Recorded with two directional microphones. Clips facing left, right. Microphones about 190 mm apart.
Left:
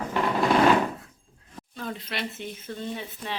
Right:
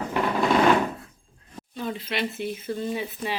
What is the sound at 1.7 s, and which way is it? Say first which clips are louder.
Speech: right 4 dB; centre (ahead or behind).